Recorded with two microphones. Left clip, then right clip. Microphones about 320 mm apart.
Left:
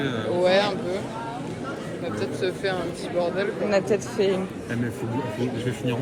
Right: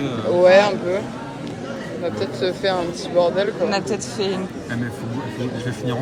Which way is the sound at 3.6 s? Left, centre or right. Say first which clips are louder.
Even; centre.